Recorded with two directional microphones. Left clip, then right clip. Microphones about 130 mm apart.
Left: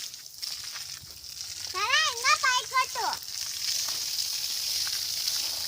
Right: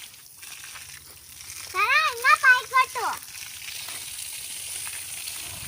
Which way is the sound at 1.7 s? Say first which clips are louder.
Right 4 dB; 20° right (ahead or behind).